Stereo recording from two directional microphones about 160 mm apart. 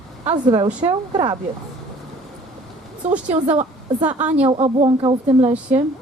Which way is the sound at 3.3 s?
40° right (ahead or behind).